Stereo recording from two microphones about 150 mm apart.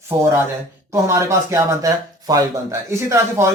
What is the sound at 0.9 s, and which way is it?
Speech, 20° right (ahead or behind).